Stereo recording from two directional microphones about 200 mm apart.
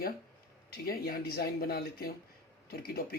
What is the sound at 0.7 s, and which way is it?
Speech, 45° left (ahead or behind).